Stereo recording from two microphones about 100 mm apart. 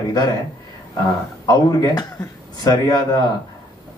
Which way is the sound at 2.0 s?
40° left (ahead or behind).